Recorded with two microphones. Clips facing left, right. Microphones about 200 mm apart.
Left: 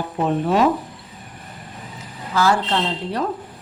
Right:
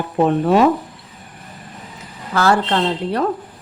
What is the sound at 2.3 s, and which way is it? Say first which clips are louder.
Speech: right 2 dB; 60° right (ahead or behind).